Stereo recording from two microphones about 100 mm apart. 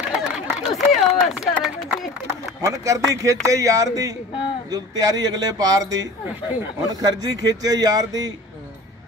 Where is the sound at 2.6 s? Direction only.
30° right (ahead or behind).